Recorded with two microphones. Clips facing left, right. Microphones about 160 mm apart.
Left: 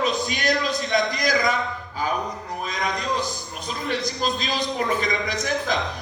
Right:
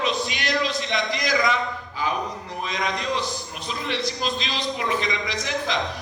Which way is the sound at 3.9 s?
45° left (ahead or behind).